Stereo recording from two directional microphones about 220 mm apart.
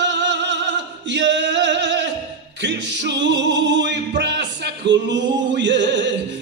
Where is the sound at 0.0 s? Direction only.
55° right (ahead or behind).